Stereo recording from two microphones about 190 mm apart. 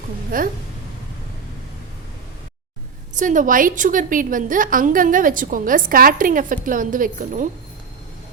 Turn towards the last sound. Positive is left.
turn(degrees=-45)  # may be behind; listen again after turning